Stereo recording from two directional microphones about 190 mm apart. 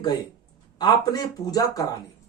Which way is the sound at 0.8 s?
20° left (ahead or behind).